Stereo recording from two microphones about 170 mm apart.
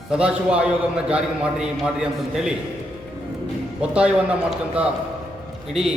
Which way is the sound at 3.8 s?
5° right (ahead or behind).